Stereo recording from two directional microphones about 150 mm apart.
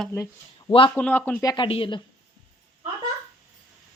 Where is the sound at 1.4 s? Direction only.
30° left (ahead or behind).